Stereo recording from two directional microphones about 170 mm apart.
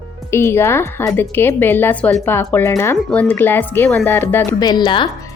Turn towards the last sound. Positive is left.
turn(degrees=30)  # may be behind; listen again after turning